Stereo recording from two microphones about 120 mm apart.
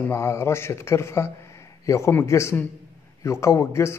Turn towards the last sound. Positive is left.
turn(degrees=25)  # may be behind; listen again after turning